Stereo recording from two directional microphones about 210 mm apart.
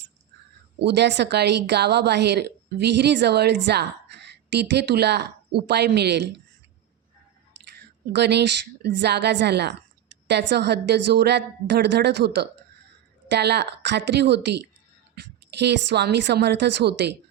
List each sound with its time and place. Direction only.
0.8 s a woman's voice: 55° right (ahead or behind)
7.8 s a woman's voice: 50° right (ahead or behind)